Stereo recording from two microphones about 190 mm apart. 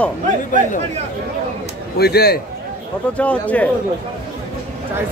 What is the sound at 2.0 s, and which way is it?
Speech, 55° left (ahead or behind).